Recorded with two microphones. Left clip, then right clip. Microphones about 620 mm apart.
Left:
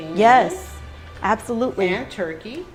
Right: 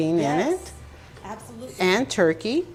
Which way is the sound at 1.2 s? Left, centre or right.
Left.